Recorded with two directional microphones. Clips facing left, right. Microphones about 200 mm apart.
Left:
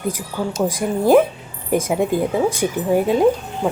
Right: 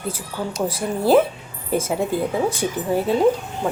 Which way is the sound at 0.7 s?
15° left (ahead or behind).